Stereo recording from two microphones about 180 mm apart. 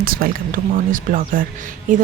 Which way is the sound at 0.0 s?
55° right (ahead or behind).